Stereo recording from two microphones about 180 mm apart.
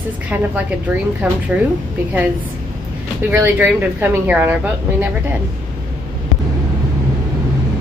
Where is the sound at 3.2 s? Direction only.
10° right (ahead or behind).